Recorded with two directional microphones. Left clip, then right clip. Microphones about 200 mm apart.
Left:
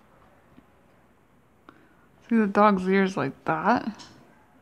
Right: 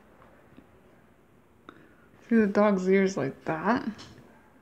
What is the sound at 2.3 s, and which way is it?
Speech, 10° left (ahead or behind).